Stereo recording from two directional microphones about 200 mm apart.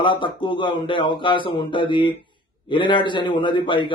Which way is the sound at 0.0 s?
25° left (ahead or behind).